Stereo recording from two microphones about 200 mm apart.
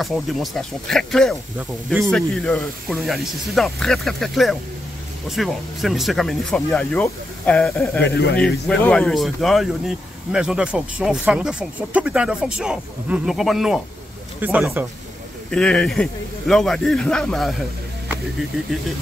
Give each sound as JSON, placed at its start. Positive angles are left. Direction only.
{"t": 0.0, "sound": "speech", "side_deg": 0}
{"t": 8.0, "sound": "speech", "side_deg": 55}
{"t": 8.4, "sound": "speech", "side_deg": 5}
{"t": 15.5, "sound": "speech", "side_deg": 5}